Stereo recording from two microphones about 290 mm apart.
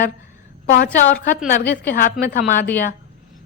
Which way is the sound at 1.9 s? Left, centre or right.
Left.